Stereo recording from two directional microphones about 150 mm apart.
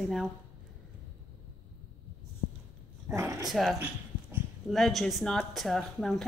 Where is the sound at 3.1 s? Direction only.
20° right (ahead or behind).